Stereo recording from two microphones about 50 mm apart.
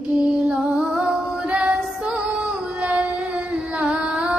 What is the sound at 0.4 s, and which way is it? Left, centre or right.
Music, centre.